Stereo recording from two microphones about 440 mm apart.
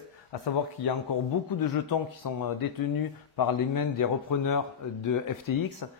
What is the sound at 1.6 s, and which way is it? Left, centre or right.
Speech, left.